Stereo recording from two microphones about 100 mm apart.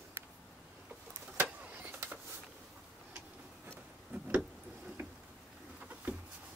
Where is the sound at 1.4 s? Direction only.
15° right (ahead or behind).